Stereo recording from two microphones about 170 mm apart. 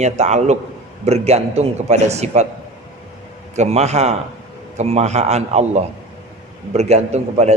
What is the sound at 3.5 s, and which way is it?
A man's voice, 40° right (ahead or behind).